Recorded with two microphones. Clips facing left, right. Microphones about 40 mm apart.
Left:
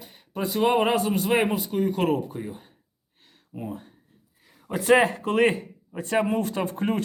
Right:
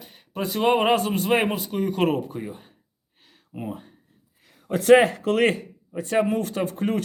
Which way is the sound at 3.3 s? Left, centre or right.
Right.